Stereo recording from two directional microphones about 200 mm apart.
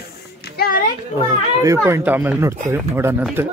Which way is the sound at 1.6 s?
15° right (ahead or behind).